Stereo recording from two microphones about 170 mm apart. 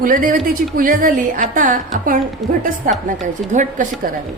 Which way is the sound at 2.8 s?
55° right (ahead or behind).